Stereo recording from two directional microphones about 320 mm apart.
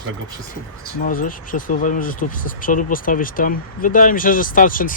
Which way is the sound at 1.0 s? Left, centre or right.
Left.